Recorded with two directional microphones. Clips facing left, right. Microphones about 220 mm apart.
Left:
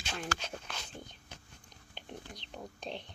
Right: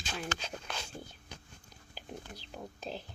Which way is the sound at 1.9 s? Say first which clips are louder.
Right 1 dB; 5° right (ahead or behind).